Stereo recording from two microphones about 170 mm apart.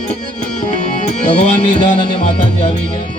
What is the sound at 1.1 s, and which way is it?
Speech, 40° left (ahead or behind).